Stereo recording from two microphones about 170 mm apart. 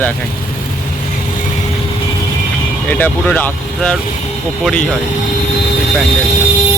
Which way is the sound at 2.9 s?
10° left (ahead or behind).